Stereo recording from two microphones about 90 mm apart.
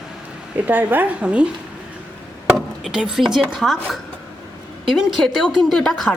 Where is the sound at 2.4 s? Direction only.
5° right (ahead or behind).